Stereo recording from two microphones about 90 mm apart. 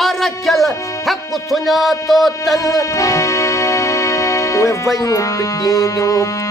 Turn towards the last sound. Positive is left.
turn(degrees=35)  # may be behind; listen again after turning